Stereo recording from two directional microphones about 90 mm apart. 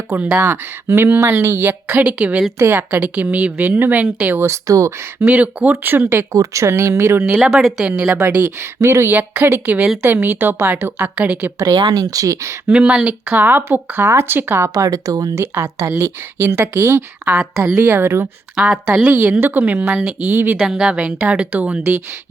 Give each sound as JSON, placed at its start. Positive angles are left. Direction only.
{"t": 0.1, "sound": "speech", "side_deg": -15}
{"t": 0.4, "sound": "a woman's voice", "side_deg": -25}
{"t": 5.2, "sound": "a woman's voice", "side_deg": -15}
{"t": 7.4, "sound": "speech", "side_deg": -5}
{"t": 8.8, "sound": "a woman's voice", "side_deg": -30}
{"t": 11.9, "sound": "speech", "side_deg": -40}
{"t": 12.6, "sound": "a woman's voice", "side_deg": -10}
{"t": 14.7, "sound": "speech", "side_deg": -40}
{"t": 15.4, "sound": "a woman's voice", "side_deg": -30}
{"t": 17.3, "sound": "speech", "side_deg": -5}
{"t": 17.7, "sound": "a woman's voice", "side_deg": -25}
{"t": 18.5, "sound": "speech", "side_deg": -5}
{"t": 19.4, "sound": "a woman's voice", "side_deg": -20}
{"t": 20.6, "sound": "speech", "side_deg": -5}